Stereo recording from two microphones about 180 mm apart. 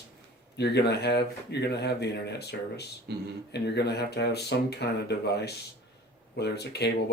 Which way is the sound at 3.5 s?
65° left (ahead or behind).